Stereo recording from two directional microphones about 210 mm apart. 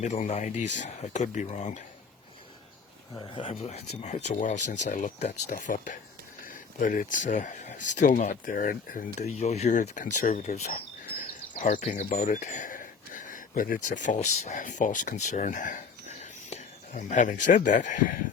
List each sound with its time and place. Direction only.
0.0 s speech: 35° left (ahead or behind)
3.2 s speech: 25° left (ahead or behind)